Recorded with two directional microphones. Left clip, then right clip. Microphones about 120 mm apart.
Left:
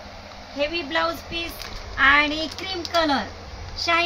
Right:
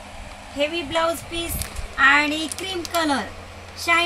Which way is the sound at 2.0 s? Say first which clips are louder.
Right 1 dB; 5° left (ahead or behind).